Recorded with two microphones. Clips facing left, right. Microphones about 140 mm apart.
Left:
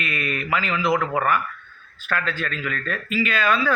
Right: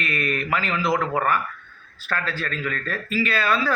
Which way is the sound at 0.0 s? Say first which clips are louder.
Right 2 dB; 40° right (ahead or behind).